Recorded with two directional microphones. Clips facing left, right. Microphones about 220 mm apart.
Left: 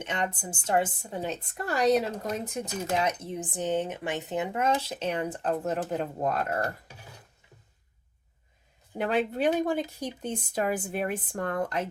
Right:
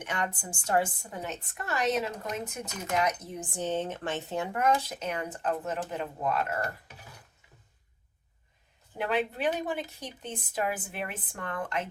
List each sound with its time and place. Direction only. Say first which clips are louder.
0.0 s a woman's voice: left 2 dB; 25° left (ahead or behind); by 6.7 s 40° left (ahead or behind)
9.0 s a woman's voice: left 3 dB; 45° left (ahead or behind)